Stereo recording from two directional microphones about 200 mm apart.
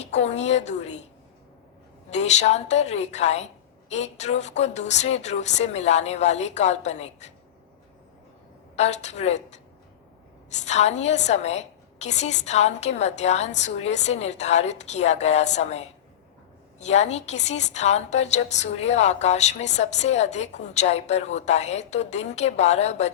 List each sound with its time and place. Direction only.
0.0 s a woman's voice: 35° left (ahead or behind)
2.0 s a woman's voice: 35° left (ahead or behind)
8.7 s a woman's voice: 35° left (ahead or behind)
16.8 s a woman's voice: 35° left (ahead or behind)